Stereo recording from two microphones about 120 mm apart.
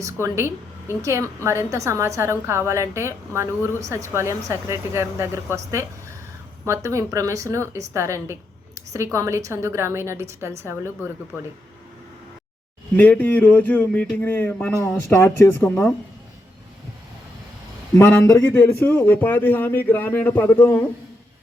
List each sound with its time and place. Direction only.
0.0 s speech: 20° right (ahead or behind)
13.0 s a man's voice: 15° left (ahead or behind)
17.9 s a man's voice: 20° left (ahead or behind)